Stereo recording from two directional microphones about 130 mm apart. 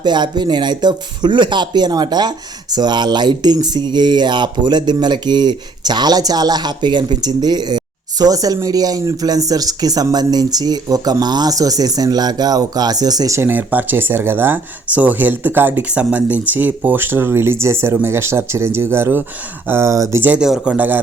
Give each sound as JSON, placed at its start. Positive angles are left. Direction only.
{"t": 0.0, "sound": "speech", "side_deg": -35}